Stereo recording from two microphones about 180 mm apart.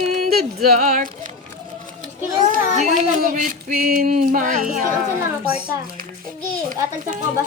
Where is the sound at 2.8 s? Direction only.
45° right (ahead or behind).